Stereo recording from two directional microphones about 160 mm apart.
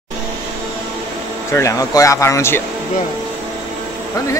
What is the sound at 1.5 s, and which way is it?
Speech, 20° left (ahead or behind).